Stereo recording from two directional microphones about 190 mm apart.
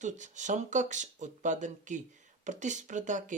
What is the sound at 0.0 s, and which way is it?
Speech, 40° right (ahead or behind).